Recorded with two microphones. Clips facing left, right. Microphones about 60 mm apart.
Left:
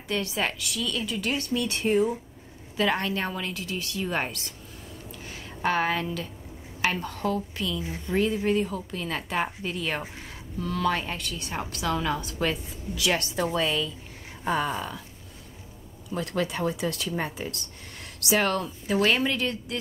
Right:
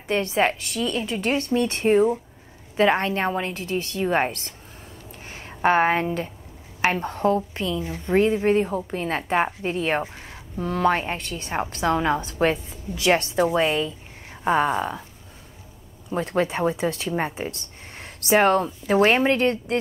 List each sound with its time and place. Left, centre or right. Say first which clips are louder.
0.1 s speech: right 7 dB; right
16.1 s speech: right 5 dB; right